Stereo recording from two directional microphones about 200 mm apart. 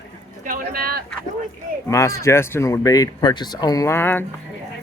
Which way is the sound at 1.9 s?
15° left (ahead or behind).